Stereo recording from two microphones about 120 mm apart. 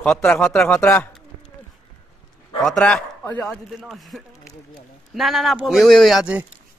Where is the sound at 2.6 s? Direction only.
5° left (ahead or behind).